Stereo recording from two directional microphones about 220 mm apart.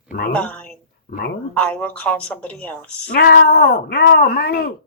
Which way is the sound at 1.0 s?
40° left (ahead or behind).